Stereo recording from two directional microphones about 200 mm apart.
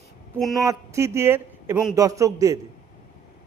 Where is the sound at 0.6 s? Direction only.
15° right (ahead or behind).